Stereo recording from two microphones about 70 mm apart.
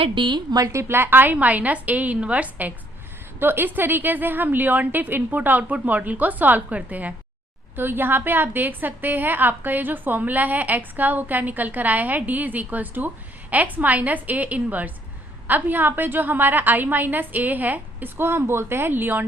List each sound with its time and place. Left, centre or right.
0.3 s a woman's voice: right
0.6 s a woman's voice: right; by 7.1 s centre
7.8 s a woman's voice: right